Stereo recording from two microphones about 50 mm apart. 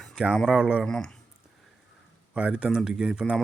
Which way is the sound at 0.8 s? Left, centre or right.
Centre.